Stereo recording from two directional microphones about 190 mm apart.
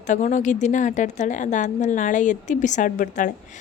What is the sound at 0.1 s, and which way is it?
A woman's voice, 40° left (ahead or behind).